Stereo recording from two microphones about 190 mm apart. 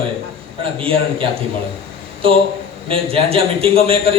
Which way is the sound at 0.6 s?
30° right (ahead or behind).